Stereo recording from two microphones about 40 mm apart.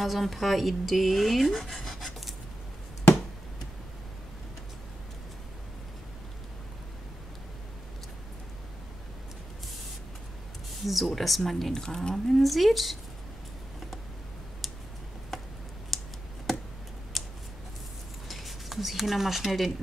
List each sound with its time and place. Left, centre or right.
0.0 s speech: centre
10.8 s speech: centre
11.7 s speech: centre
12.3 s speech: centre
15.9 s computer keyboard: centre
17.1 s scissors: centre
18.3 s speech: centre